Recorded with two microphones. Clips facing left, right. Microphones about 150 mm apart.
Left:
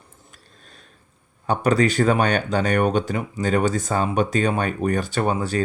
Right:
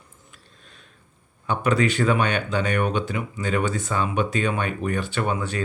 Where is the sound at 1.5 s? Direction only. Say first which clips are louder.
Left 3 dB; 40° left (ahead or behind).